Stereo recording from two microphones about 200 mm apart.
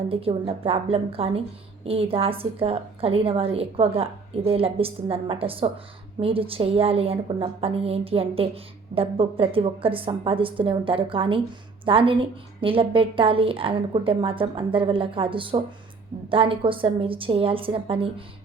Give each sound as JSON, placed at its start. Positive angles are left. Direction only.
{"t": 0.1, "sound": "a woman's voice", "side_deg": -30}